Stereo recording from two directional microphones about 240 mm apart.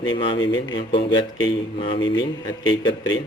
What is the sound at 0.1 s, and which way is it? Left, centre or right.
A man's voice, centre.